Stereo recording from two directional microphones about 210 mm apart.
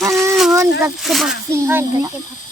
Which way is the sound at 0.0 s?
Centre (ahead or behind).